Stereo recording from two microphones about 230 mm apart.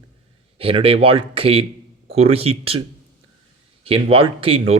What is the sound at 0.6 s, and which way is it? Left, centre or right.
Speech, right.